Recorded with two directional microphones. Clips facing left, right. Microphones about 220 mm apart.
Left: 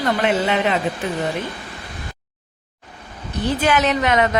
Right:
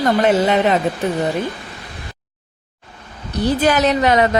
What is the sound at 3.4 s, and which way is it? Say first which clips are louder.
Speech: right 3 dB; 35° right (ahead or behind).